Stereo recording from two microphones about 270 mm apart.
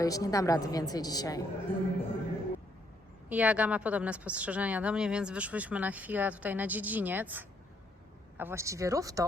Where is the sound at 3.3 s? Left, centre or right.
Centre.